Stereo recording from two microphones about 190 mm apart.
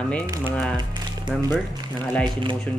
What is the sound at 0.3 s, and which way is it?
Speech, 15° right (ahead or behind).